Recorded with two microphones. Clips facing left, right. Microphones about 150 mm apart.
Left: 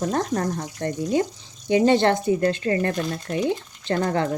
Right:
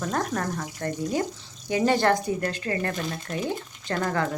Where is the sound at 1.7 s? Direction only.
25° left (ahead or behind).